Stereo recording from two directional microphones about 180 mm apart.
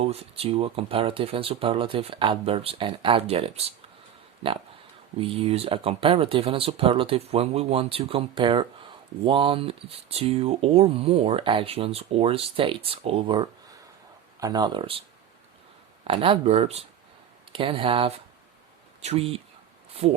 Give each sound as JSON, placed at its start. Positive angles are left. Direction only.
{"t": 0.0, "sound": "speech", "side_deg": -35}
{"t": 5.1, "sound": "speech", "side_deg": -30}
{"t": 16.0, "sound": "speech", "side_deg": -30}